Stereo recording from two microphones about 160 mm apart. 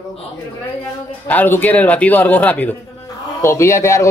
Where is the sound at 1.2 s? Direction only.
10° left (ahead or behind).